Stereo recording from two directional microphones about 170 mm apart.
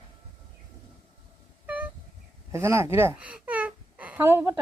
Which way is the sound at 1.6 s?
10° right (ahead or behind).